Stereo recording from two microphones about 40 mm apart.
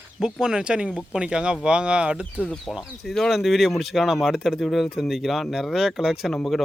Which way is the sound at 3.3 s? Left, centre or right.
Centre.